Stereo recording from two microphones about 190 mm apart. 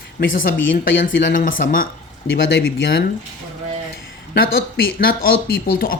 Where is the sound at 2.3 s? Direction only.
80° left.